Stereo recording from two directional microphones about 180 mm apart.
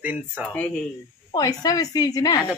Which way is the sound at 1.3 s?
20° left (ahead or behind).